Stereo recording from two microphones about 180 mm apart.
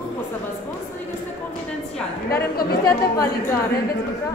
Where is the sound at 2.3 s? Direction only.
60° left (ahead or behind).